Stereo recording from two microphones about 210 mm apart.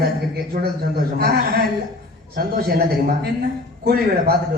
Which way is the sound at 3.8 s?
45° right (ahead or behind).